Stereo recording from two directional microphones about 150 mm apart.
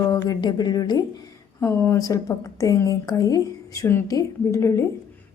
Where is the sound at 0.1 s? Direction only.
25° left (ahead or behind).